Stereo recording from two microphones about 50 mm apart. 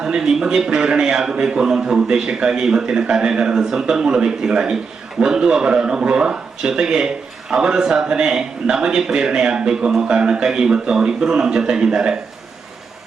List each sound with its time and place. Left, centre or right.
0.0 s a man's voice: centre